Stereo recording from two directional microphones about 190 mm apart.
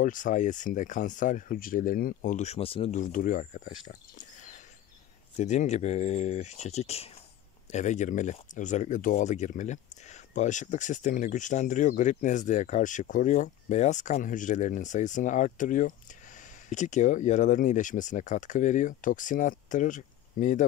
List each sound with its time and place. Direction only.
0.0 s speech: 45° left (ahead or behind)
4.2 s a sound: 40° left (ahead or behind)
5.4 s speech: 40° left (ahead or behind)